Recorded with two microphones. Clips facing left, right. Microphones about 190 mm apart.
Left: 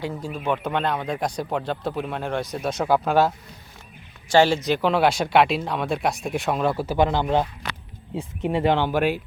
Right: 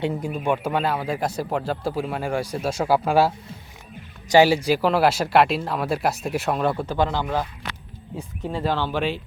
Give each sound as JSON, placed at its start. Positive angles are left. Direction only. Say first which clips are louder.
{"t": 0.0, "sound": "speech", "louder": "right 3 dB", "side_deg": -15}